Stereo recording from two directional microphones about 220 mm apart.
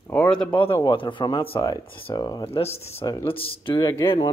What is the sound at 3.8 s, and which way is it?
Speech, 15° left (ahead or behind).